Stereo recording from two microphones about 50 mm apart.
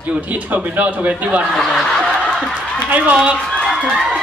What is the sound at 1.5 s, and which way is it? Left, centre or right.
Speech, centre.